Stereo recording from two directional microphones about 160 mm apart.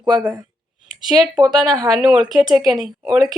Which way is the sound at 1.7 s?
20° right (ahead or behind).